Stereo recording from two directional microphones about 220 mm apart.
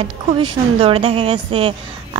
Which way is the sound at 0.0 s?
25° right (ahead or behind).